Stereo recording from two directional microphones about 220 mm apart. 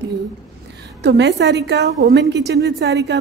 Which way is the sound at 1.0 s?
50° right (ahead or behind).